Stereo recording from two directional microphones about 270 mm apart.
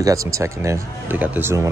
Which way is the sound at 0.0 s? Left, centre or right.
Centre.